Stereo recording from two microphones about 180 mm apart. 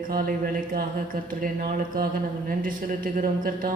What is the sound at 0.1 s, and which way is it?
Speech, 55° right (ahead or behind).